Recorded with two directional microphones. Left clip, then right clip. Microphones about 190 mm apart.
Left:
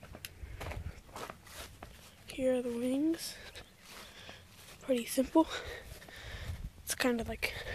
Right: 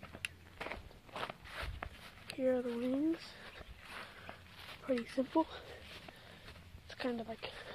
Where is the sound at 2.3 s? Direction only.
20° left (ahead or behind).